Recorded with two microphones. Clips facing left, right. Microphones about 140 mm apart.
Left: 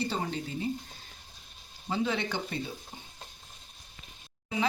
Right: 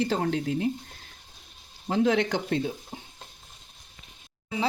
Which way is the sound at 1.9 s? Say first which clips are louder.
Right 7 dB; 75° right (ahead or behind).